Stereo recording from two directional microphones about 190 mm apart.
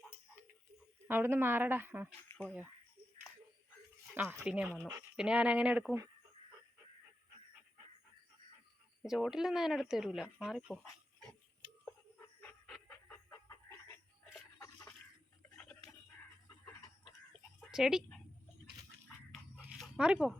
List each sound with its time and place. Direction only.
1.0 s speech: 10° right (ahead or behind)
2.3 s cricket: 15° left (ahead or behind)
4.1 s speech: 10° right (ahead or behind)
9.0 s speech: centre (ahead or behind)
12.4 s dog: 5° left (ahead or behind)
13.1 s chicken: 15° left (ahead or behind)
14.6 s a sound: 15° left (ahead or behind)
17.6 s speech: centre (ahead or behind)
19.8 s a sound: 5° right (ahead or behind)